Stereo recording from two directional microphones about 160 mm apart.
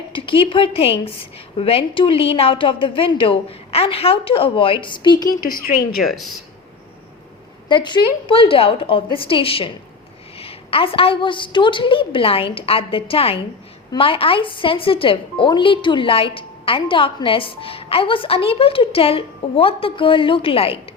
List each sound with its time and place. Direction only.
0.1 s a woman's voice: 30° left (ahead or behind)
6.1 s speech: centre (ahead or behind)
7.7 s a woman's voice: 30° left (ahead or behind)